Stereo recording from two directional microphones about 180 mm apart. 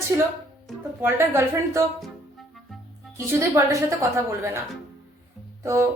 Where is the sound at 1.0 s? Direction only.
15° right (ahead or behind).